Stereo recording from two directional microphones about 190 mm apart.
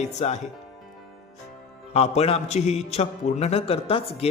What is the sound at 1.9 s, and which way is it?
A man's voice, 35° left (ahead or behind).